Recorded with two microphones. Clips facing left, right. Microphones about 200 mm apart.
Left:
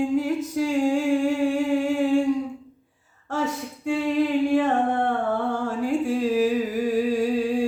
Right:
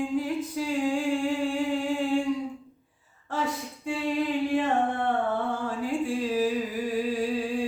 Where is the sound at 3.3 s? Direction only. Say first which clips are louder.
Left 3 dB; 45° left (ahead or behind).